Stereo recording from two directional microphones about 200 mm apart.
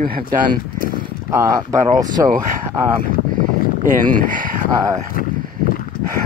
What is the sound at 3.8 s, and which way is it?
Speech, 40° right (ahead or behind).